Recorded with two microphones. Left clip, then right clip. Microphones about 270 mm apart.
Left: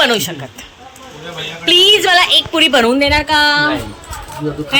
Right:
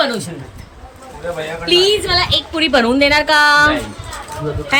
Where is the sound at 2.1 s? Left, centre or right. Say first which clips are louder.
Left 5 dB; centre.